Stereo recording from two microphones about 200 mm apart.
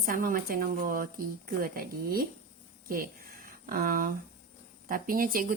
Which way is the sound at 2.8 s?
45° right (ahead or behind).